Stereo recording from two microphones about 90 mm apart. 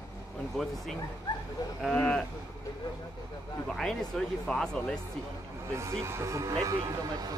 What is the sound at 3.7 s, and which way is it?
Speech, 5° left (ahead or behind).